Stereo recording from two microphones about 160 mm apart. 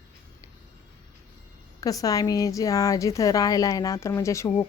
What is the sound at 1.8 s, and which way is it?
A woman's voice, 20° left (ahead or behind).